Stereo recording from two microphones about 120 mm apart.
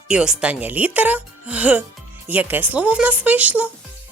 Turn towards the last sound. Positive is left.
turn(degrees=-10)  # may be behind; listen again after turning